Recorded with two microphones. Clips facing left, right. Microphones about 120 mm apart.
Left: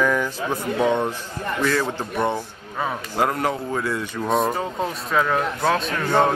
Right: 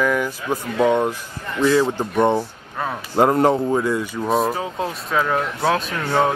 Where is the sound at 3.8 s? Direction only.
15° right (ahead or behind).